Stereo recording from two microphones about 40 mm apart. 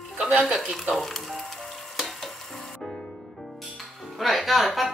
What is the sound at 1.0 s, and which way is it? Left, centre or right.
Speech, centre.